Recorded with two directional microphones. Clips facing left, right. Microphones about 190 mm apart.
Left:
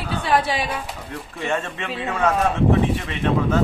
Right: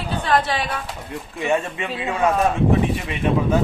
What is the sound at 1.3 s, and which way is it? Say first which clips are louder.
Speech: right 4 dB; 10° right (ahead or behind).